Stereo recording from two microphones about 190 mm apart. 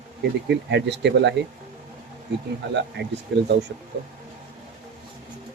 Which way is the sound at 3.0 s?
65° right (ahead or behind).